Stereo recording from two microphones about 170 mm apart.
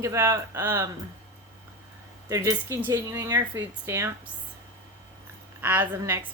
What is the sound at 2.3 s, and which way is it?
Speech, 15° right (ahead or behind).